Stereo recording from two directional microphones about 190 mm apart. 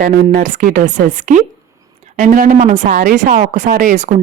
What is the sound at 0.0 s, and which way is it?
Speech, 45° right (ahead or behind).